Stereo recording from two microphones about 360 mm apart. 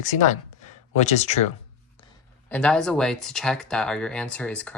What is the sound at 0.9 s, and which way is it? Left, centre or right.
Speech, centre.